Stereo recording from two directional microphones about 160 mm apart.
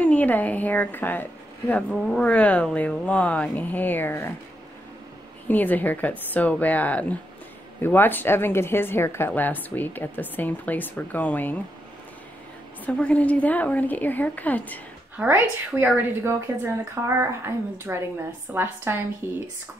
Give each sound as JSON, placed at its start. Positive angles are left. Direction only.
{"t": 0.0, "sound": "a woman's voice", "side_deg": 10}
{"t": 5.5, "sound": "a woman's voice", "side_deg": 10}
{"t": 12.8, "sound": "a woman's voice", "side_deg": 10}
{"t": 15.1, "sound": "a woman's voice", "side_deg": -15}